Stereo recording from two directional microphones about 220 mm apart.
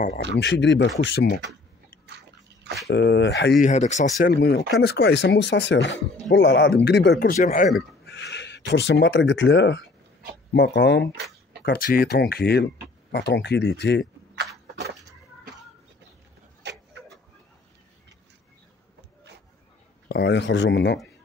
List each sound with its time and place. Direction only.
0.4 s speech: 55° left (ahead or behind)
2.9 s speech: 50° left (ahead or behind)
3.6 s speech: 30° left (ahead or behind)
4.2 s speech: 50° left (ahead or behind); by 7.7 s 35° left (ahead or behind)
8.0 s speech: 50° left (ahead or behind)
11.6 s speech: 45° left (ahead or behind)
20.1 s speech: 45° left (ahead or behind)